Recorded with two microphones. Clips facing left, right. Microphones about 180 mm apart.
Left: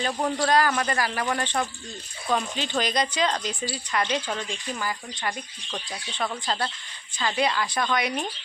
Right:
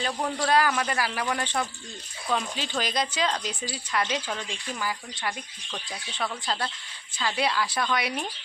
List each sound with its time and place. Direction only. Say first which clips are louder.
0.0 s a man's voice: left 3 dB; centre (ahead or behind)